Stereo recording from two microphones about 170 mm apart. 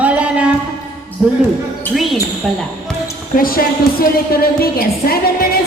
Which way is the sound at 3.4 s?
60° left (ahead or behind).